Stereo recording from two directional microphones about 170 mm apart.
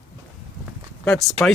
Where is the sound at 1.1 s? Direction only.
Centre (ahead or behind).